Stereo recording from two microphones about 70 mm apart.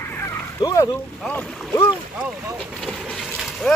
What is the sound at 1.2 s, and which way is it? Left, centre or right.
Speech, centre.